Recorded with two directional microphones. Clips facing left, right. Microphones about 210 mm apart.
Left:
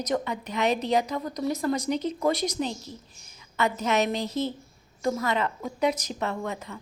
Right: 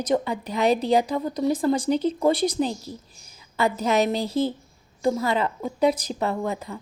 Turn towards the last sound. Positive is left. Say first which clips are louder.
# right 5 dB
turn(degrees=-35)  # may be behind; listen again after turning